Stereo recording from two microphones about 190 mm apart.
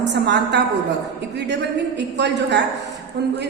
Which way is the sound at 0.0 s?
65° right (ahead or behind).